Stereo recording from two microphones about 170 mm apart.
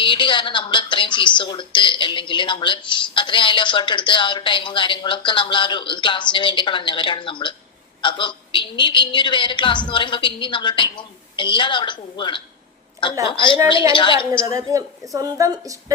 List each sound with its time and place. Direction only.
0.0 s a woman's voice: 30° left (ahead or behind)
14.5 s a woman's voice: 20° right (ahead or behind)